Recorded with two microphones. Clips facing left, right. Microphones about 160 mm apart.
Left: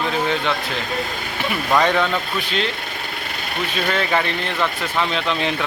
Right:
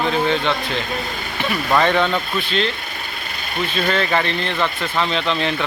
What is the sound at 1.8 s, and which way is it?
Speech, 5° left (ahead or behind).